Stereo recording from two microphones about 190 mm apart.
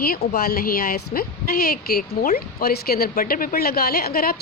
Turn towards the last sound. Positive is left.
turn(degrees=50)  # may be behind; listen again after turning